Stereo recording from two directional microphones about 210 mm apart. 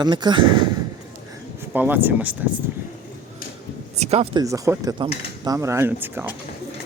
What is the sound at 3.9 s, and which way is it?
Speech, 30° right (ahead or behind).